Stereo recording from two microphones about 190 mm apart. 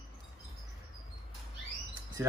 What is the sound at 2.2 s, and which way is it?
Speech, 15° right (ahead or behind).